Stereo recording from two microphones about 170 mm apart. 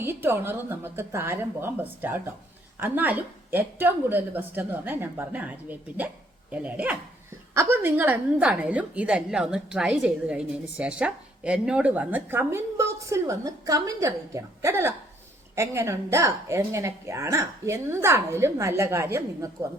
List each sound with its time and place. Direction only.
0.0 s speech: 15° right (ahead or behind)